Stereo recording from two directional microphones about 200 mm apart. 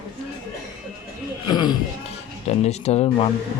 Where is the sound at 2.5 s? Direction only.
35° left (ahead or behind).